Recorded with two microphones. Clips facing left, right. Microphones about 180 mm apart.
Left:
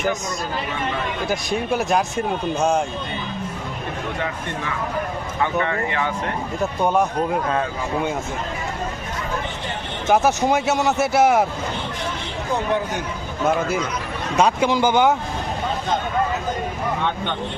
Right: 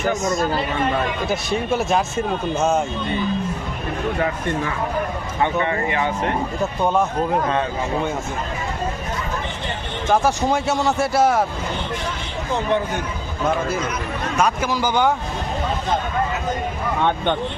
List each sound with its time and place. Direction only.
1.9 s speech: centre (ahead or behind)
5.4 s speech: 20° right (ahead or behind)
6.8 s speech: 15° left (ahead or behind)
10.1 s speech: 15° left (ahead or behind)
14.3 s speech: 30° left (ahead or behind)
17.0 s speech: 55° right (ahead or behind)